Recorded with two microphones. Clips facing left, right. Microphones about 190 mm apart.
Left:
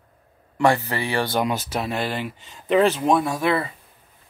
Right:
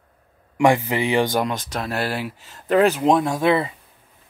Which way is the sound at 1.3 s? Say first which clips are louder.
Even; 5° left (ahead or behind).